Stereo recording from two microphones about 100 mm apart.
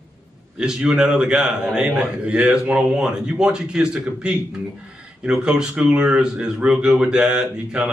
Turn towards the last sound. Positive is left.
turn(degrees=-10)  # may be behind; listen again after turning